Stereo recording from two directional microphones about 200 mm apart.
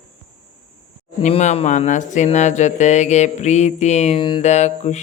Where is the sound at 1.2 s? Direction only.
35° left (ahead or behind).